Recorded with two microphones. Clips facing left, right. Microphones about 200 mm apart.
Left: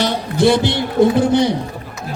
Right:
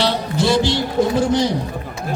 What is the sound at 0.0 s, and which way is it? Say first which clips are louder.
Speech: left 4 dB; 55° left (ahead or behind).